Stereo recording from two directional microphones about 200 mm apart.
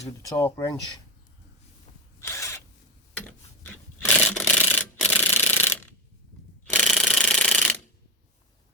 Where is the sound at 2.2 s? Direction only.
15° left (ahead or behind).